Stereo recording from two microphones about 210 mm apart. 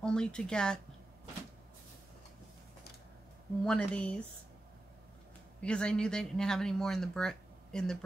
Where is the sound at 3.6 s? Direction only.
5° left (ahead or behind).